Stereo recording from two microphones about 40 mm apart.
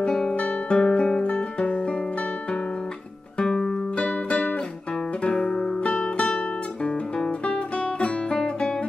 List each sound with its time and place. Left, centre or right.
0.0 s guitar: centre
1.2 s guitar: left
3.3 s music: centre
5.8 s music: left